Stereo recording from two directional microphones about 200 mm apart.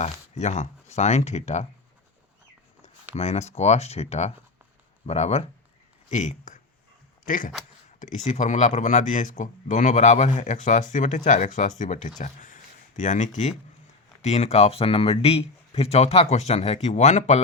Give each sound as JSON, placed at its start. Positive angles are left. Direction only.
{"t": 0.0, "sound": "speech", "side_deg": 35}
{"t": 3.2, "sound": "speech", "side_deg": 35}